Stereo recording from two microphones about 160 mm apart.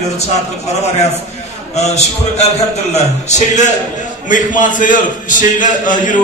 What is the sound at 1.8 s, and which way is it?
A man's voice, 45° left (ahead or behind).